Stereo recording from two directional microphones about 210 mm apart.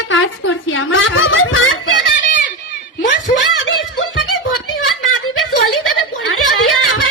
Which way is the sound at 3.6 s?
65° left (ahead or behind).